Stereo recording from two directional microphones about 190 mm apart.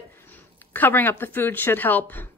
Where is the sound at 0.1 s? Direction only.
10° left (ahead or behind).